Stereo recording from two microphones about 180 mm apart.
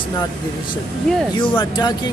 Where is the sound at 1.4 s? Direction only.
25° left (ahead or behind).